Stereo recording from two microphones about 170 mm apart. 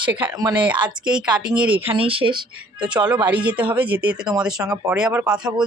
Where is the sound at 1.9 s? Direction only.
35° right (ahead or behind).